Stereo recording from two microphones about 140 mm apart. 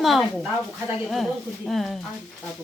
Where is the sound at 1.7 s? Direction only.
Centre (ahead or behind).